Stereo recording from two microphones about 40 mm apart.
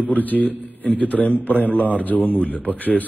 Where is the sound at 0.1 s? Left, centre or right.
Left.